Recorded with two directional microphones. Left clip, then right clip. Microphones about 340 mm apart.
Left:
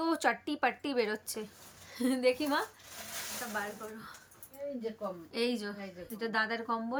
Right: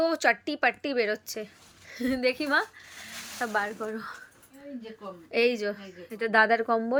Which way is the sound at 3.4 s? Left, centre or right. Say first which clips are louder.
Right 15 dB; centre.